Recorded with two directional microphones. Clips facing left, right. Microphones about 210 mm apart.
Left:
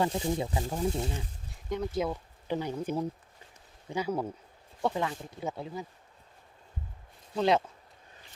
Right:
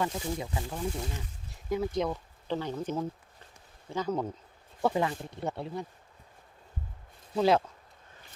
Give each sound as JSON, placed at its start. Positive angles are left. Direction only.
{"t": 0.0, "sound": "speech", "side_deg": 25}
{"t": 1.7, "sound": "speech", "side_deg": 0}
{"t": 4.8, "sound": "speech", "side_deg": -5}
{"t": 7.3, "sound": "speech", "side_deg": 0}